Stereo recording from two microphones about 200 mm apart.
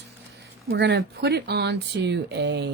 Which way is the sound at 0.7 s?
60° right (ahead or behind).